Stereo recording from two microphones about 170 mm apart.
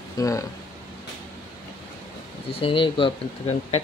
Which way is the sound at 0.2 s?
20° left (ahead or behind).